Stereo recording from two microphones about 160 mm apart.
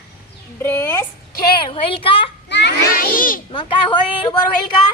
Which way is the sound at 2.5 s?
90° left.